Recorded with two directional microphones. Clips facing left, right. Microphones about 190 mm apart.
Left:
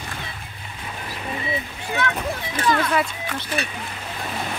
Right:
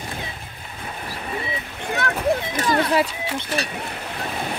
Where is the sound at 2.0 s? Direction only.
35° right (ahead or behind).